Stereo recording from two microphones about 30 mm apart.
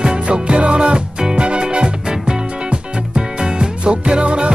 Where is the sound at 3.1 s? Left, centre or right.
Right.